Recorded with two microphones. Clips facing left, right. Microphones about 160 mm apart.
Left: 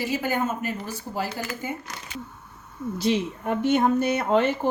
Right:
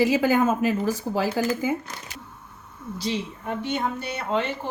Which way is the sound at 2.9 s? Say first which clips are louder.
Left 5 dB; 55° left (ahead or behind).